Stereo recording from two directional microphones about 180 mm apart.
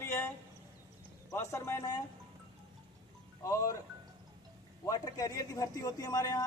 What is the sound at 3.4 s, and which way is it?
Speech, 15° left (ahead or behind).